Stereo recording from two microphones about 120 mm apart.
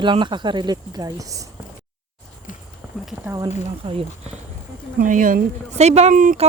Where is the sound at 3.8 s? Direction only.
50° right (ahead or behind).